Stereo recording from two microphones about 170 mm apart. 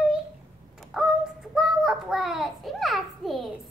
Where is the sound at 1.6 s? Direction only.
5° right (ahead or behind).